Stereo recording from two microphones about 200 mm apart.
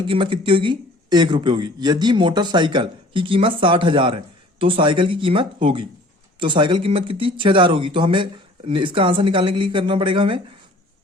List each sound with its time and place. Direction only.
0.1 s speech: 25° right (ahead or behind)